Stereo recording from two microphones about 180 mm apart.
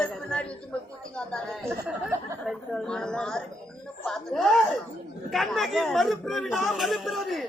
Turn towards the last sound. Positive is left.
turn(degrees=0)  # may be behind; listen again after turning